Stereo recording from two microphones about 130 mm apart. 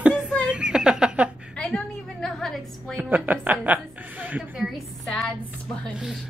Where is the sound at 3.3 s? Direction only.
15° right (ahead or behind).